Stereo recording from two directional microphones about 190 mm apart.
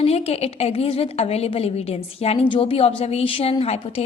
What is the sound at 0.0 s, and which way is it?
A woman's voice, 30° left (ahead or behind).